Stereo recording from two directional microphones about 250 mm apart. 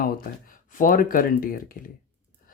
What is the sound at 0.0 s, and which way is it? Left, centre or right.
Speech, left.